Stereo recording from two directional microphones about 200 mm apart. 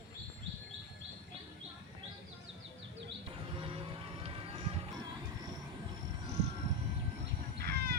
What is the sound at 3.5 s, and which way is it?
Music, 25° right (ahead or behind).